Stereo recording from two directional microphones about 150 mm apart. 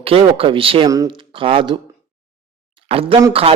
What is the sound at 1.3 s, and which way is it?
Speech, 35° right (ahead or behind).